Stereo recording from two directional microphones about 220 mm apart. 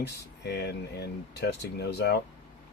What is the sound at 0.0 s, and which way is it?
Speech, 50° left (ahead or behind).